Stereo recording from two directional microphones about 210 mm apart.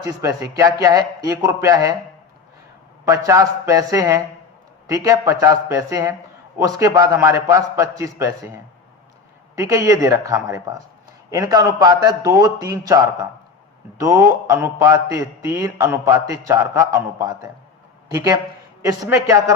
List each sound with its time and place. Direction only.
0.0 s a man's voice: 15° right (ahead or behind)
3.0 s a man's voice: 15° right (ahead or behind)
9.6 s a man's voice: 15° right (ahead or behind)
14.0 s a man's voice: 15° right (ahead or behind)